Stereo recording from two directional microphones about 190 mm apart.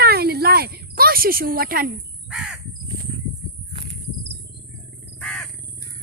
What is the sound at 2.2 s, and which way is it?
Crow, 5° right (ahead or behind).